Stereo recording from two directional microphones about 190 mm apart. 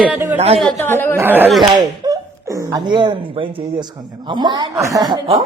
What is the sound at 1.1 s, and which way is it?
A woman's voice, 10° right (ahead or behind).